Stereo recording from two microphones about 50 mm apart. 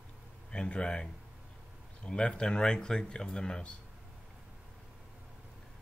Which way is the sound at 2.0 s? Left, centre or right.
Centre.